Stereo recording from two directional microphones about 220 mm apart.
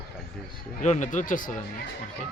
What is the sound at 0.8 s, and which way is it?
Speech, 35° left (ahead or behind).